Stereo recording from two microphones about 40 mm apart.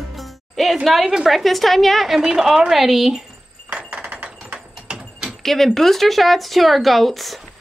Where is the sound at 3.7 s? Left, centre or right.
Right.